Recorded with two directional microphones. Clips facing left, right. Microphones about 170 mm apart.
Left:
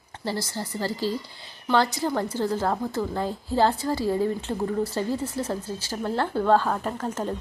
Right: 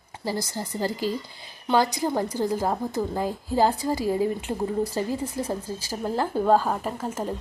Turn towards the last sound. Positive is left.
turn(degrees=-5)  # may be behind; listen again after turning